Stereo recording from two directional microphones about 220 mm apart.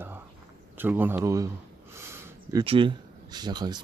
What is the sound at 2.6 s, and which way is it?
Speech, 25° right (ahead or behind).